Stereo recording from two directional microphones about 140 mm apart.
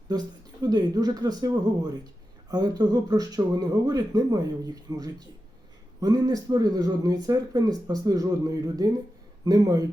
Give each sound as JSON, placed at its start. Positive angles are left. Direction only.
{"t": 0.6, "sound": "speech", "side_deg": -30}